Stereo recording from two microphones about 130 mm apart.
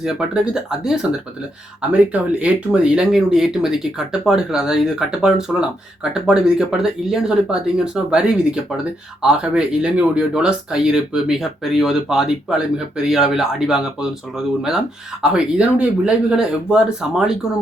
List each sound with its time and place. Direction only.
0.0 s speech: 5° right (ahead or behind)
15.2 s speech: 5° right (ahead or behind)